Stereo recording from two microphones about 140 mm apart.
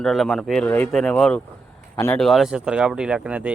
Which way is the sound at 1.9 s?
20° left (ahead or behind).